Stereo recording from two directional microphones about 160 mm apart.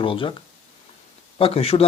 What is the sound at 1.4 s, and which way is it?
Speech, 35° left (ahead or behind).